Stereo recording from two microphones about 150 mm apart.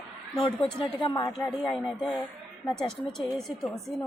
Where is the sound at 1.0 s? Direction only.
35° left (ahead or behind).